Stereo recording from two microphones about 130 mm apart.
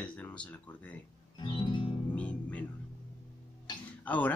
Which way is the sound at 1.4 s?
35° left (ahead or behind).